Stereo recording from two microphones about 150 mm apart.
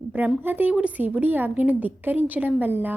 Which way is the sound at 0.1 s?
10° right (ahead or behind).